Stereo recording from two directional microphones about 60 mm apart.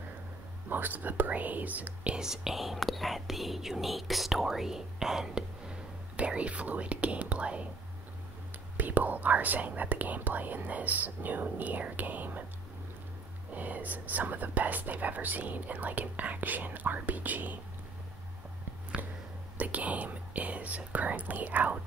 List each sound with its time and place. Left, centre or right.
0.7 s speech: right
2.1 s speech: centre
6.1 s speech: right
8.7 s speech: right
13.5 s speech: right
19.0 s a sound: right
19.5 s speech: right